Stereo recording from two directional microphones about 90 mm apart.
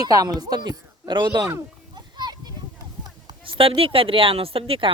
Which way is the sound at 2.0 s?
50° right (ahead or behind).